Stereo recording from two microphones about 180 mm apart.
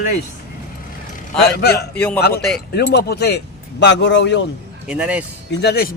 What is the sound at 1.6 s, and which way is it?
Speech, 65° left (ahead or behind).